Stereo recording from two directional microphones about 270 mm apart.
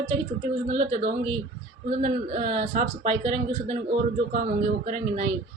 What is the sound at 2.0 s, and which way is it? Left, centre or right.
A man's voice, right.